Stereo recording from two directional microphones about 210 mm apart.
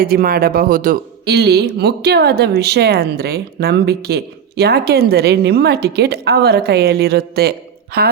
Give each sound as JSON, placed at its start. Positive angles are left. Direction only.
{"t": 0.0, "sound": "speech", "side_deg": -45}